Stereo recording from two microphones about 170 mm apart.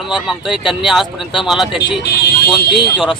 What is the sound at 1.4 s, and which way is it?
Speech, centre (ahead or behind).